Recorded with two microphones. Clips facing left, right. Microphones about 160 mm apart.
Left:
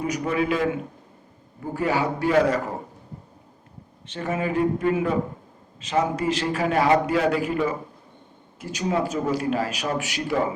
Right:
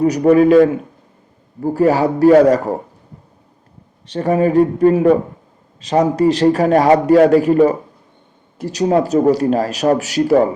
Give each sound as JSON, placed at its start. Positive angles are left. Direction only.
{"t": 0.0, "sound": "a man's voice", "side_deg": -40}
{"t": 4.0, "sound": "a man's voice", "side_deg": -40}